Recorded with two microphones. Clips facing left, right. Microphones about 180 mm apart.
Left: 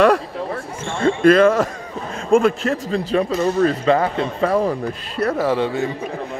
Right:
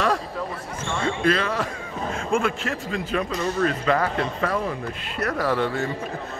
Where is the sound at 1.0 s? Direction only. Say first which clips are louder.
Left 11 dB; 50° left (ahead or behind).